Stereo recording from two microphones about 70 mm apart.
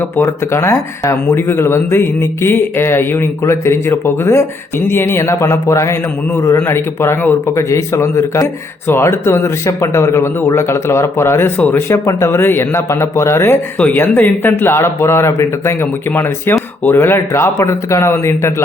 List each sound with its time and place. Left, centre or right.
0.2 s a man's voice: left
1.4 s a man's voice: left
11.9 s speech: left
13.7 s speech: left